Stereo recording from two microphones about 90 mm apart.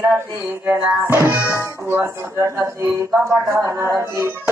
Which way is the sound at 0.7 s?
25° right (ahead or behind).